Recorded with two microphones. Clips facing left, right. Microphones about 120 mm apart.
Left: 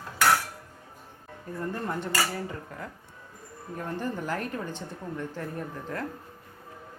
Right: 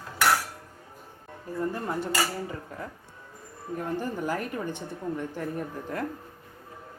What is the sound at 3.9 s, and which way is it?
Speech, 10° right (ahead or behind).